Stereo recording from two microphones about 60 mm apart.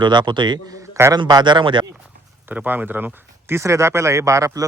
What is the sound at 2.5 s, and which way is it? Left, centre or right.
Speech, right.